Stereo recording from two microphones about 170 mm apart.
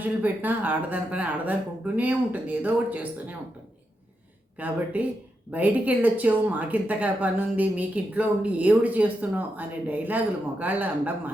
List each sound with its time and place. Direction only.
0.0 s speech: 10° right (ahead or behind)
4.5 s speech: 10° right (ahead or behind)